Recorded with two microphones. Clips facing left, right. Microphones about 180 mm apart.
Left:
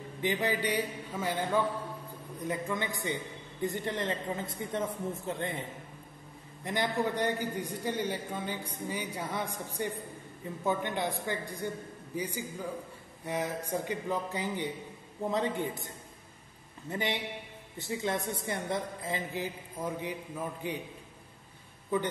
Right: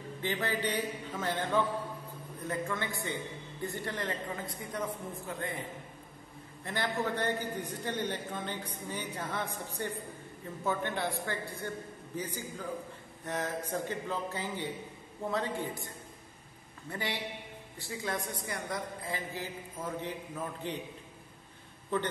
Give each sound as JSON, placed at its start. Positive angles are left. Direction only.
{"t": 0.2, "sound": "a man's voice", "side_deg": 15}
{"t": 6.6, "sound": "a man's voice", "side_deg": 15}
{"t": 16.9, "sound": "a woman's voice", "side_deg": 20}
{"t": 21.9, "sound": "a man's voice", "side_deg": 10}